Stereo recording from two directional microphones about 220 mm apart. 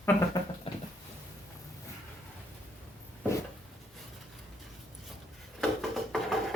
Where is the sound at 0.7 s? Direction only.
25° left (ahead or behind).